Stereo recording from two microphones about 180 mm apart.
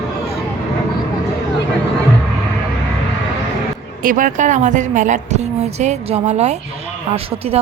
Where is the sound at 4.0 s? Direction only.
50° right (ahead or behind).